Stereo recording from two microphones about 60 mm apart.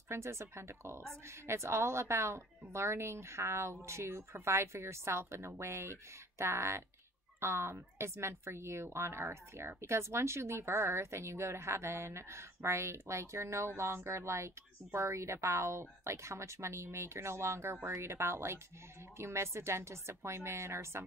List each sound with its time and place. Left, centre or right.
0.1 s speech: right